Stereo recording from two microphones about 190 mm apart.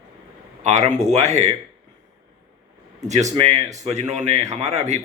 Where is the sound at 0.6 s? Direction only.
35° right (ahead or behind).